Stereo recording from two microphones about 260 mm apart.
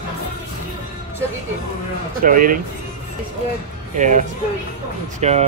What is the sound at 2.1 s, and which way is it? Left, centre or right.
Speech, right.